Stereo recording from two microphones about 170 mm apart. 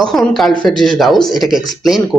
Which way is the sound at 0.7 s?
25° left (ahead or behind).